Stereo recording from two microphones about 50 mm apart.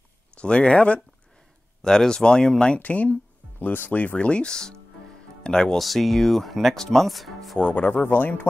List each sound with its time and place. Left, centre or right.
0.4 s speech: left
1.8 s speech: centre
2.8 s speech: left
3.5 s speech: left; by 5.8 s centre
5.8 s speech: centre
7.5 s speech: left
8.1 s speech: left